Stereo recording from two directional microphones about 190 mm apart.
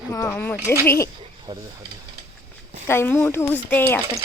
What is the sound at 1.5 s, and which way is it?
Speech, 20° right (ahead or behind).